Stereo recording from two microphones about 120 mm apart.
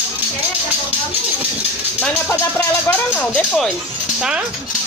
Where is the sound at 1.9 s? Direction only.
15° left (ahead or behind).